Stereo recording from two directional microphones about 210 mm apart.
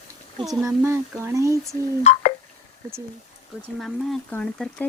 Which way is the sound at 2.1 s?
30° left (ahead or behind).